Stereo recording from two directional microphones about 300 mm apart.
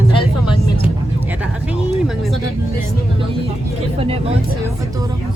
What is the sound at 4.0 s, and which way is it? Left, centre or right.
Speech, centre.